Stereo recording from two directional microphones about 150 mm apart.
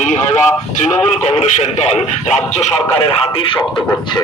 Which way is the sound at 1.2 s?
45° left (ahead or behind).